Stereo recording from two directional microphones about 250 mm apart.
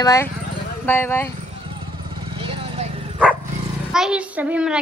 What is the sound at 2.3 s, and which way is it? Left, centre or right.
Bow-wow, right.